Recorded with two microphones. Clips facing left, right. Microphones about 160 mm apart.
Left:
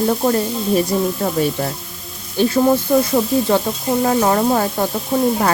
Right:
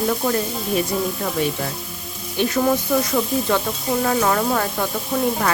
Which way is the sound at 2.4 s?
30° left (ahead or behind).